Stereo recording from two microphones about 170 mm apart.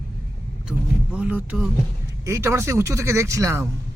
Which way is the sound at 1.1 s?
10° right (ahead or behind).